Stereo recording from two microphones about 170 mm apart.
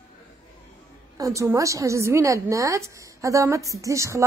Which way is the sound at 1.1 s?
20° right (ahead or behind).